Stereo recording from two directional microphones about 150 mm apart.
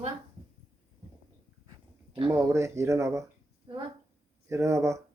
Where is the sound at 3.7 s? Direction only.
30° right (ahead or behind).